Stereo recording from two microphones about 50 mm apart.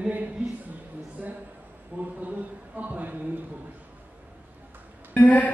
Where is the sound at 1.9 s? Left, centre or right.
Right.